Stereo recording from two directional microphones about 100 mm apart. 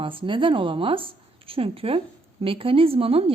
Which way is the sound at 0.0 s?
60° right (ahead or behind).